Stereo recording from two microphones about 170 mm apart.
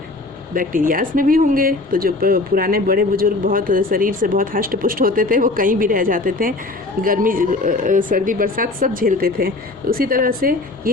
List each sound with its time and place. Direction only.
0.5 s speech: 55° right (ahead or behind)